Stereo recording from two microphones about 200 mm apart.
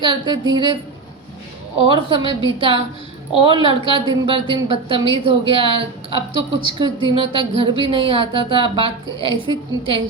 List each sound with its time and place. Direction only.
0.0 s a woman's voice: 20° right (ahead or behind)
1.9 s a woman's voice: 25° right (ahead or behind)